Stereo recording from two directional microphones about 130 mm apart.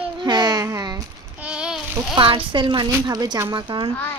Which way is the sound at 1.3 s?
10° right (ahead or behind).